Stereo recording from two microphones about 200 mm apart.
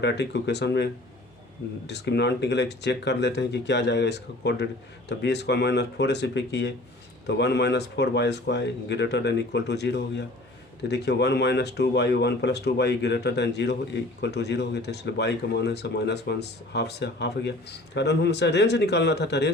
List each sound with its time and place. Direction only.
0.0 s speech: 60° left (ahead or behind)
1.9 s speech: 60° left (ahead or behind)